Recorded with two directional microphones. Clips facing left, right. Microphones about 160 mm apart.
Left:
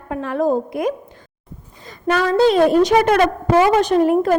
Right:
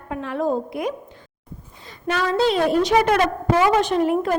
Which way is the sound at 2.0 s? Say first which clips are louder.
Left 5 dB; 45° left (ahead or behind).